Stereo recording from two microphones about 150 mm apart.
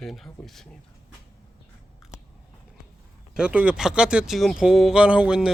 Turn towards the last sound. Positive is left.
turn(degrees=-5)  # may be behind; listen again after turning